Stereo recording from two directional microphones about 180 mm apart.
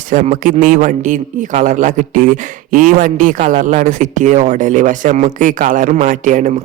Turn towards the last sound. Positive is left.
turn(degrees=-45)  # may be behind; listen again after turning